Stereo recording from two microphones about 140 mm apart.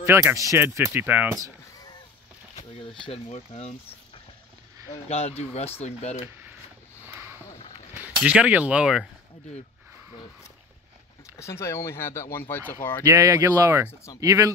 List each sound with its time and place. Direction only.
0.0 s speech: 20° right (ahead or behind)
2.5 s a sound: 40° left (ahead or behind)
3.1 s speech: 45° left (ahead or behind)
5.0 s speech: 50° left (ahead or behind)
8.0 s speech: 10° right (ahead or behind)
11.3 s speech: 20° left (ahead or behind)
13.0 s speech: 20° right (ahead or behind)